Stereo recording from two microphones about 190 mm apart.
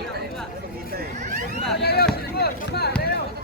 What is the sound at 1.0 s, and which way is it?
Vehicle, 40° right (ahead or behind).